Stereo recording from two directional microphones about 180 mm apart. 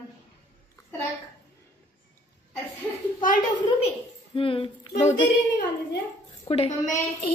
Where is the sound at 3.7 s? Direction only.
30° left (ahead or behind).